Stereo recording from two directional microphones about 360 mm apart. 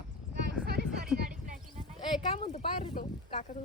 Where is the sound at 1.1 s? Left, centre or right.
Centre.